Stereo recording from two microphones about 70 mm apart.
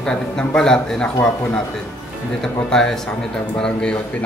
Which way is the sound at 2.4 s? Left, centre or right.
Centre.